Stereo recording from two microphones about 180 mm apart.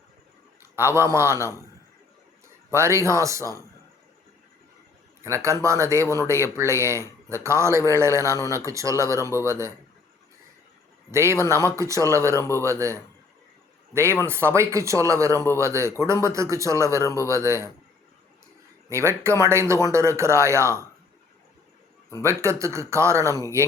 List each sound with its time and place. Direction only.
0.6 s a man's voice: 15° right (ahead or behind)
2.7 s speech: 15° right (ahead or behind)
5.2 s speech: 15° right (ahead or behind)
11.1 s speech: 15° right (ahead or behind)
12.4 s a man's voice: 15° left (ahead or behind)
12.6 s speech: 15° right (ahead or behind)
18.9 s speech: 15° right (ahead or behind)
22.2 s speech: 15° right (ahead or behind)